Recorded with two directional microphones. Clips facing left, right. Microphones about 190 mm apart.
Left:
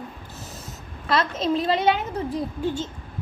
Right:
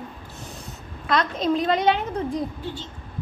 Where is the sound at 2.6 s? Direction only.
45° left (ahead or behind).